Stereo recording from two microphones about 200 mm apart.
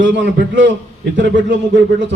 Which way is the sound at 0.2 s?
65° right (ahead or behind).